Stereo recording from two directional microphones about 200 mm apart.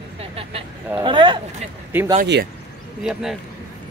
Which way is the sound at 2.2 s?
60° right (ahead or behind).